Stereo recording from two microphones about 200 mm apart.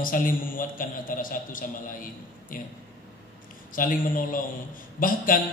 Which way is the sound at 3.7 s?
45° left (ahead or behind).